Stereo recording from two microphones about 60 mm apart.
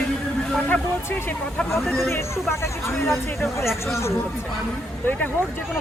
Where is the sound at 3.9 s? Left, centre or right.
Left.